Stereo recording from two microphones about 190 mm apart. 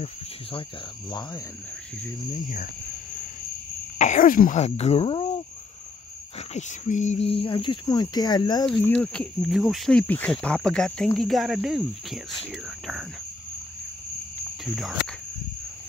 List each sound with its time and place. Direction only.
0.0 s speech: 30° left (ahead or behind)
2.3 s speech: 45° left (ahead or behind)
4.0 s speech: 45° left (ahead or behind)
6.5 s speech: 40° left (ahead or behind); by 8.6 s 20° left (ahead or behind)
8.6 s speech: 5° left (ahead or behind)
14.6 s speech: centre (ahead or behind)